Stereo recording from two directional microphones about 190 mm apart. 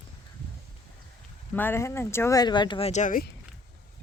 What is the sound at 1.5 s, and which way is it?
Speech, 10° left (ahead or behind).